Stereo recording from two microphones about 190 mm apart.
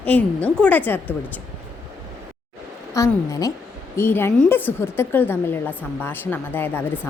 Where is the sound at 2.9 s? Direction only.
15° left (ahead or behind).